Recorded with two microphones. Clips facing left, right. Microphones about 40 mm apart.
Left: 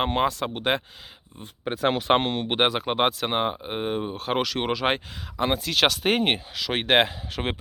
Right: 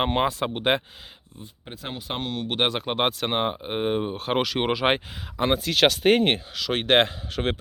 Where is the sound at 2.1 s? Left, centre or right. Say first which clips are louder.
Left 7 dB; left.